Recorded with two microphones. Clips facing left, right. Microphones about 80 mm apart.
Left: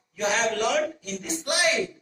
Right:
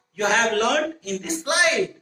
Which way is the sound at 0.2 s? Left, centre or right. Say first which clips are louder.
Right 4 dB; right.